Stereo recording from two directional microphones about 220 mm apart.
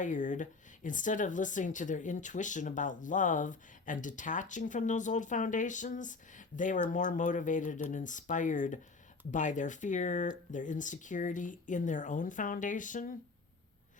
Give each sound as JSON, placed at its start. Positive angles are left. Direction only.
{"t": 0.0, "sound": "speech", "side_deg": 35}